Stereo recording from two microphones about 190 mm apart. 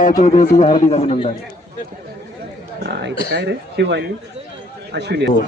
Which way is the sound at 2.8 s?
60° right (ahead or behind).